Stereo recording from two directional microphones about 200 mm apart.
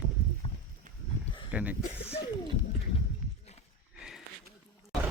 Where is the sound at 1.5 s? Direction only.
5° right (ahead or behind).